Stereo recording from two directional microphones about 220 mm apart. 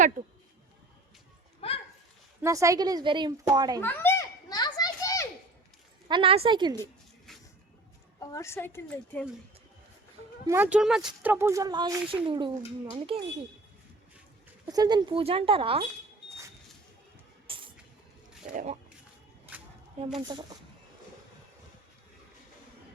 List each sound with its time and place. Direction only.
1.6 s a sound: 25° left (ahead or behind)
2.4 s speech: 15° right (ahead or behind)
3.8 s children playing: 10° left (ahead or behind)
6.1 s a woman's voice: 25° right (ahead or behind)
8.2 s a woman's voice: 15° left (ahead or behind)
10.4 s a woman's voice: 10° right (ahead or behind)
14.7 s a woman's voice: 20° right (ahead or behind)
17.4 s music: 25° right (ahead or behind)
18.5 s speech: 30° right (ahead or behind)